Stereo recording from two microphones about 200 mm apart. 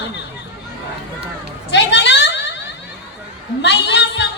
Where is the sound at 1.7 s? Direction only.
60° left (ahead or behind).